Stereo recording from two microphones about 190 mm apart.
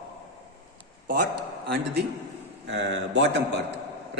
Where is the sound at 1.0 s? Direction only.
50° right (ahead or behind).